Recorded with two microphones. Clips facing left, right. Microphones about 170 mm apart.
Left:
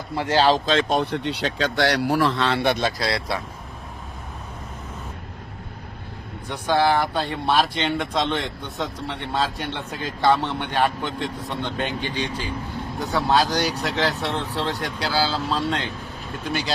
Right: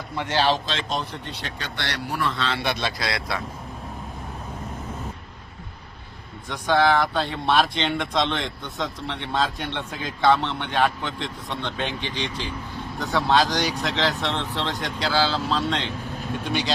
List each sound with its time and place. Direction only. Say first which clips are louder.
0.2 s speech: left 4 dB; 35° left (ahead or behind); by 2.6 s 90° left
2.6 s speech: left 5 dB; 50° left (ahead or behind)
6.5 s speech: even; 10° left (ahead or behind)
13.0 s speech: even; 5° left (ahead or behind)